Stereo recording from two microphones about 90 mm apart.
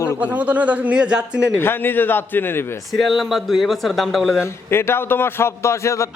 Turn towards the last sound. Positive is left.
turn(degrees=35)  # may be behind; listen again after turning